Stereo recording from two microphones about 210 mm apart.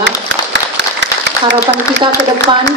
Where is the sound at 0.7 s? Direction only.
55° right (ahead or behind).